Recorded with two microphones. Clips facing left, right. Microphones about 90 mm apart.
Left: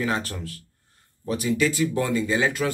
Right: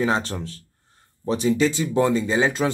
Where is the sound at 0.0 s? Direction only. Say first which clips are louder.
Right 4 dB; 25° right (ahead or behind).